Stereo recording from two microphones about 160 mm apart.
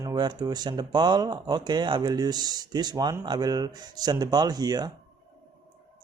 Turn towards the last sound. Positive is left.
turn(degrees=-25)  # may be behind; listen again after turning